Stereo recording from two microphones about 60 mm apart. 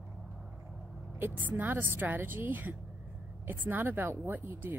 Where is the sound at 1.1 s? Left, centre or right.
Right.